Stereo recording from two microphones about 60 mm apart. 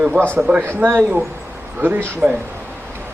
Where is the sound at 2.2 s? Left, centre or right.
Right.